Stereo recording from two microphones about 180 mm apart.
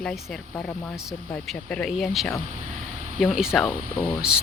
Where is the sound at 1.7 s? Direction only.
5° left (ahead or behind).